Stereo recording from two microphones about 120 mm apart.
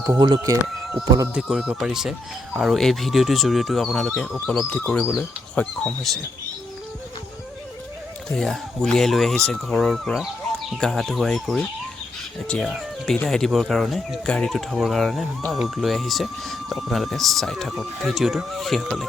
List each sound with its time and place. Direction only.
0.2 s speech: 35° right (ahead or behind)
1.3 s speech: 5° right (ahead or behind)
8.4 s speech: 5° left (ahead or behind)